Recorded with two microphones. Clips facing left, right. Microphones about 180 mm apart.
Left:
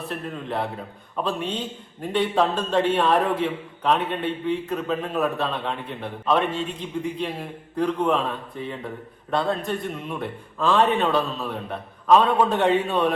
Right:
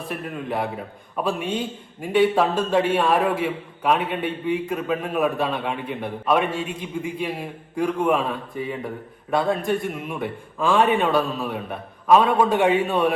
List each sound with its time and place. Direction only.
0.1 s a man's voice: 10° right (ahead or behind)